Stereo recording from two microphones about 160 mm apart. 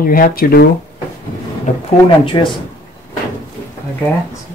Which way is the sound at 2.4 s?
30° left (ahead or behind).